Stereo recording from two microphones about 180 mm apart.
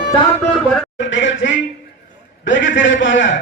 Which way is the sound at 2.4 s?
90° left.